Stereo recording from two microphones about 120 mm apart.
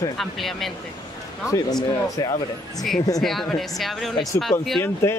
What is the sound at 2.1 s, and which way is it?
Speech, 35° left (ahead or behind).